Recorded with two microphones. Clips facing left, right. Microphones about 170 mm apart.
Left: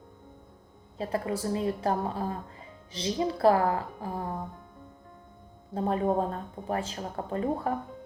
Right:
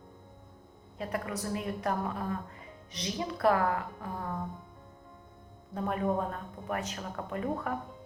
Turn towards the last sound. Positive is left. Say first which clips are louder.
# left 4 dB
turn(degrees=30)  # may be behind; listen again after turning